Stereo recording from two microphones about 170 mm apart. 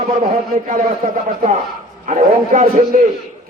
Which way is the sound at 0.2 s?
50° right (ahead or behind).